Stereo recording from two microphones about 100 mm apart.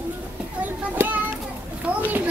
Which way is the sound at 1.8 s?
15° right (ahead or behind).